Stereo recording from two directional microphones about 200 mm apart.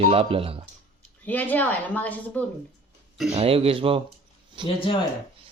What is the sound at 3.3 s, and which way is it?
Speech, 30° right (ahead or behind).